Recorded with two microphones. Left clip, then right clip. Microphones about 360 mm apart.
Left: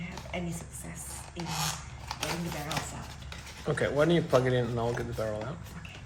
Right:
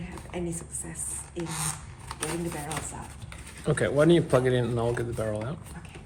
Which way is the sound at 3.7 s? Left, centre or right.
Right.